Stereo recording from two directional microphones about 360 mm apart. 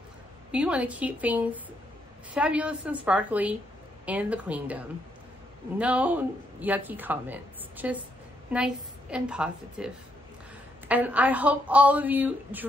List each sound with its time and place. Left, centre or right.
0.5 s speech: centre
10.9 s speech: centre